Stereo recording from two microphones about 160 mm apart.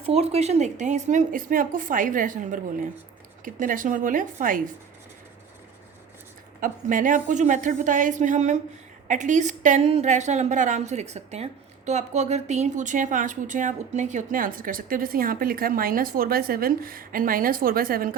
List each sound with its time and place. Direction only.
0.0 s a woman's voice: 40° right (ahead or behind); by 4.6 s 55° right (ahead or behind)
6.6 s a woman's voice: 55° right (ahead or behind)